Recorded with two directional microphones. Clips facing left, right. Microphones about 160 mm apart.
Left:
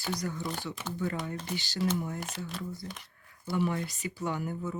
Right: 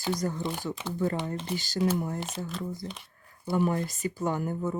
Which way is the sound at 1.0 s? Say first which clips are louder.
Right 5 dB; 35° right (ahead or behind).